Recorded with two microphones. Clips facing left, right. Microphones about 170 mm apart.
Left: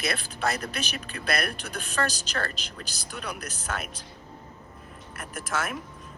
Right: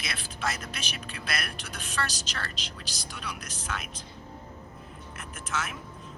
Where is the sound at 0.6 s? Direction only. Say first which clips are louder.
Left 5 dB; 45° left (ahead or behind).